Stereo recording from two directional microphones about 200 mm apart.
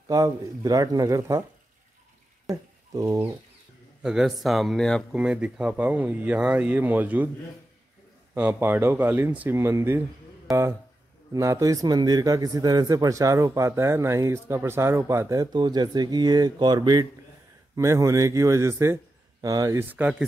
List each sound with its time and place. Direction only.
0.1 s a man's voice: 15° right (ahead or behind)
2.5 s speech: 15° right (ahead or behind)
4.0 s a man's voice: 5° right (ahead or behind)
8.4 s a man's voice: 10° right (ahead or behind)